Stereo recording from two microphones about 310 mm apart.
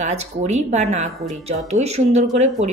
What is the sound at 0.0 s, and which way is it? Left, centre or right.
A woman's voice, right.